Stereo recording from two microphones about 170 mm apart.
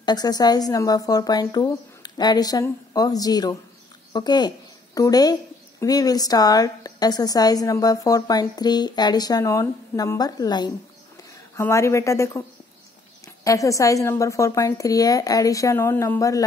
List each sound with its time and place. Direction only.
0.0 s a woman's voice: 25° left (ahead or behind)